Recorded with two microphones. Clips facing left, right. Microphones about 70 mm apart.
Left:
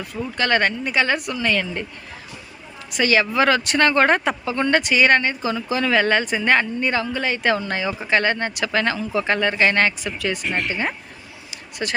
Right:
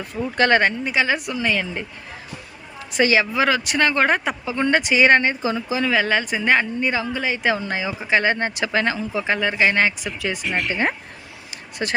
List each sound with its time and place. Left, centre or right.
0.3 s speech: right
0.6 s a woman's voice: centre
2.9 s a woman's voice: right
3.2 s a woman's voice: centre
10.7 s a woman's voice: right
11.5 s a sound: right